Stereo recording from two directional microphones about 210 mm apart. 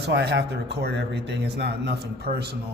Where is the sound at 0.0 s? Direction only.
50° right (ahead or behind).